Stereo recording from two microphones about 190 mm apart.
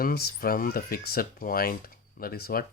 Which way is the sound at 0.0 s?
55° left (ahead or behind).